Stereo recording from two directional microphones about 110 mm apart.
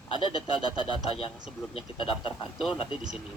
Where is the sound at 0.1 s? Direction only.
50° left (ahead or behind).